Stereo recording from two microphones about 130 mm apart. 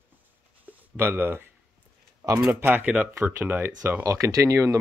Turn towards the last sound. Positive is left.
turn(degrees=-25)  # may be behind; listen again after turning